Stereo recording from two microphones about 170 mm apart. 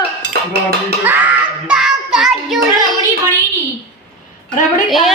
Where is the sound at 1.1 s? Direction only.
10° right (ahead or behind).